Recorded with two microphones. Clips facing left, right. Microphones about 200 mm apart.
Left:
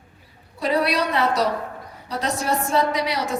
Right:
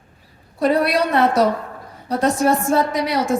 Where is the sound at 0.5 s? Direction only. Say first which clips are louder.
Right 4 dB; 50° right (ahead or behind).